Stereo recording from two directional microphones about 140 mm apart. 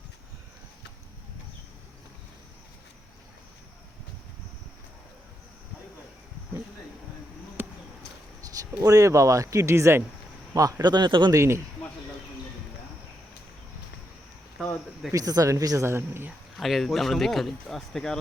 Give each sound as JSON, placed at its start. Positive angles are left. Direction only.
{"t": 7.6, "sound": "a sound", "side_deg": -15}
{"t": 8.4, "sound": "speech", "side_deg": -25}
{"t": 11.3, "sound": "speech", "side_deg": -20}
{"t": 14.6, "sound": "a sound", "side_deg": 5}
{"t": 15.1, "sound": "speech", "side_deg": -25}
{"t": 16.6, "sound": "speech", "side_deg": 0}